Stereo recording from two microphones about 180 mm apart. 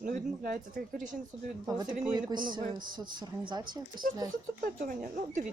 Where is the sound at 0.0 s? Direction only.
50° right (ahead or behind).